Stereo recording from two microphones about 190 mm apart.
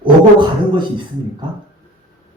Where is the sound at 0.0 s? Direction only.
25° right (ahead or behind).